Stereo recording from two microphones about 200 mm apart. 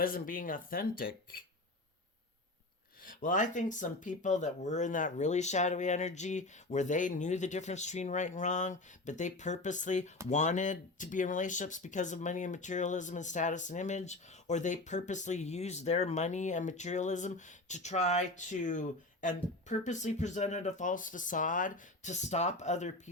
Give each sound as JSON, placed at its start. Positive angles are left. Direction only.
{"t": 0.0, "sound": "speech", "side_deg": 45}
{"t": 3.2, "sound": "speech", "side_deg": 40}